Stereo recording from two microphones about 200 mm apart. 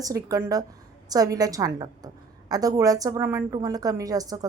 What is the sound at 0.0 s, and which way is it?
A woman's voice, 15° right (ahead or behind).